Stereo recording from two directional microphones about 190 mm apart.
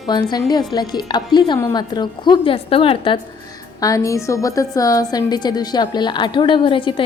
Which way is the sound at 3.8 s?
15° left (ahead or behind).